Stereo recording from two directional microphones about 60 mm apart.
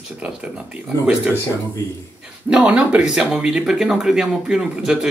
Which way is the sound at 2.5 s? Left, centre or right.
Centre.